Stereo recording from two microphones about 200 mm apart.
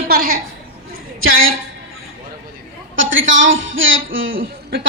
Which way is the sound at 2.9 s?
70° right (ahead or behind).